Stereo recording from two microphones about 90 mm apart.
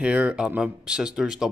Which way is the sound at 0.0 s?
15° right (ahead or behind).